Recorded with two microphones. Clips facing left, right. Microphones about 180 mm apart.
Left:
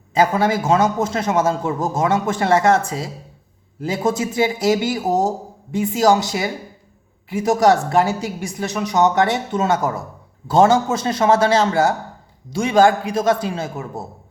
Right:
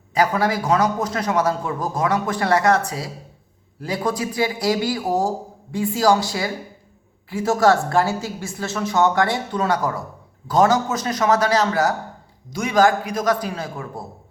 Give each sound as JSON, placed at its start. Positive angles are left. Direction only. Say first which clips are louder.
{"t": 0.1, "sound": "a man's voice", "louder": "left 3 dB", "side_deg": 25}